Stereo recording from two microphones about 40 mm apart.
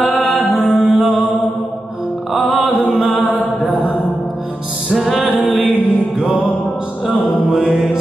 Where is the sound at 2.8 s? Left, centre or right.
Centre.